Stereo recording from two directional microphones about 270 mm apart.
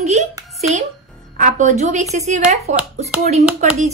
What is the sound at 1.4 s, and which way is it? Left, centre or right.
Speech, right.